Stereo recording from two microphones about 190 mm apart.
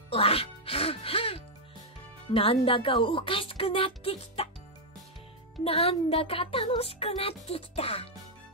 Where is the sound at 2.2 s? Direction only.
30° left (ahead or behind).